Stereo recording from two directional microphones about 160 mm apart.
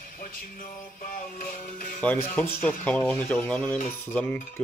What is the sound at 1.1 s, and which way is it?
Music, 55° left (ahead or behind).